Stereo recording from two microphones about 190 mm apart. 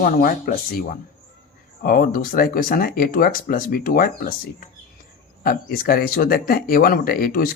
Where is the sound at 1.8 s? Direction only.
45° left (ahead or behind).